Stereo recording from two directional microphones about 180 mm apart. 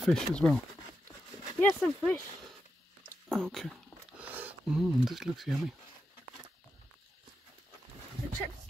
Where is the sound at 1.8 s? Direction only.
10° left (ahead or behind).